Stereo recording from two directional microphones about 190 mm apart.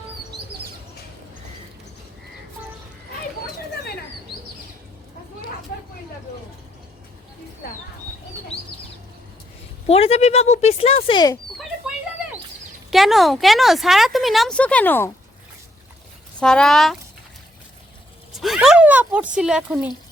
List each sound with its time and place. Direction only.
9.8 s speech: 30° left (ahead or behind)
12.9 s speech: centre (ahead or behind)
16.4 s speech: 5° left (ahead or behind)
18.3 s a sound: centre (ahead or behind)
19.4 s speech: 5° right (ahead or behind)